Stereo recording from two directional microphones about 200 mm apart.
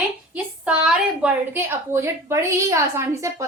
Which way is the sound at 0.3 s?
5° right (ahead or behind).